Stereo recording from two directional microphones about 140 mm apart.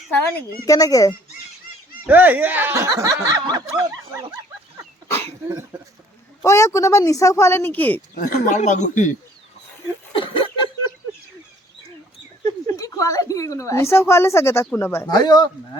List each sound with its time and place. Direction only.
0.6 s a woman's voice: 25° left (ahead or behind)
2.0 s speech: 10° right (ahead or behind)
6.4 s a woman's voice: 20° left (ahead or behind)
8.1 s speech: 70° left (ahead or behind)
10.1 s a sound: 35° left (ahead or behind)
12.6 s a woman's voice: 25° left (ahead or behind)
15.0 s a woman's voice: 30° left (ahead or behind)